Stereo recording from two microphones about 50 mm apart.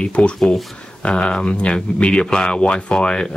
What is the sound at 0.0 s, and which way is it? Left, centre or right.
Speech, left.